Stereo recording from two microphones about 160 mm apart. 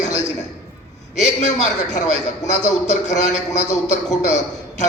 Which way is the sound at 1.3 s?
50° left (ahead or behind).